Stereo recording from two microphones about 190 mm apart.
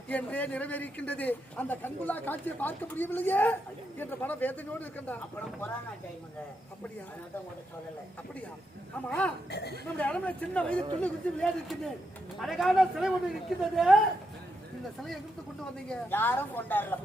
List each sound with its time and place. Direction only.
0.1 s a man's voice: 5° left (ahead or behind)
9.0 s a man's voice: 5° left (ahead or behind)
9.5 s speech: 60° left (ahead or behind)
10.0 s a man's voice: 5° left (ahead or behind)
15.9 s a man's voice: 10° left (ahead or behind)